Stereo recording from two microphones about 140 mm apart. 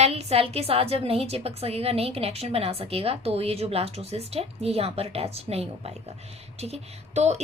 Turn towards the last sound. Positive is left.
turn(degrees=-50)  # may be behind; listen again after turning